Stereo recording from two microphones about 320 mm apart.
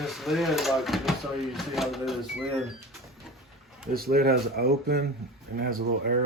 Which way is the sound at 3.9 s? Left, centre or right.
Right.